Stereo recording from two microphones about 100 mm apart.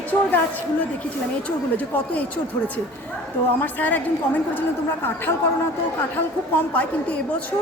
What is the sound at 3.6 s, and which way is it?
A woman's voice, 15° left (ahead or behind).